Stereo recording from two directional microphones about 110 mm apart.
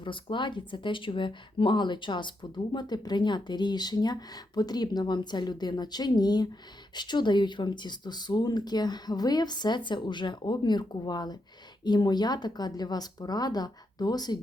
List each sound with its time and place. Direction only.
0.0 s speech: 50° left (ahead or behind)